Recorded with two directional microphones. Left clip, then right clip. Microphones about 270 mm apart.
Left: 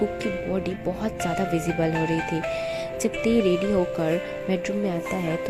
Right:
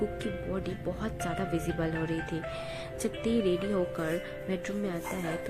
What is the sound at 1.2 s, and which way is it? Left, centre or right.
Speech, left.